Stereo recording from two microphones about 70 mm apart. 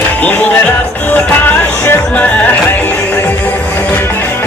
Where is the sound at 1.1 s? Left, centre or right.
Left.